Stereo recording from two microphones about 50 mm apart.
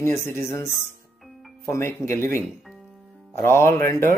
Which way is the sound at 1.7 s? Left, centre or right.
Left.